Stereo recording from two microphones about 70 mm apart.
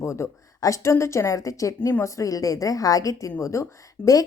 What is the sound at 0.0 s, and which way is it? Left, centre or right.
A woman's voice, left.